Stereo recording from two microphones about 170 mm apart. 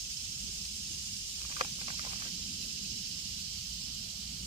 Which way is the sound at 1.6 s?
30° right (ahead or behind).